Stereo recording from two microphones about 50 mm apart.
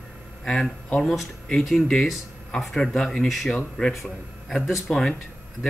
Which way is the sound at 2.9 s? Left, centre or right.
Centre.